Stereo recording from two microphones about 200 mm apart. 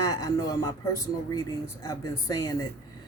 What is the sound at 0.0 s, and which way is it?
A woman's voice, 20° left (ahead or behind).